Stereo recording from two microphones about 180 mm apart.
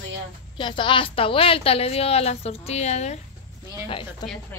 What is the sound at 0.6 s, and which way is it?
A woman's voice, 25° left (ahead or behind).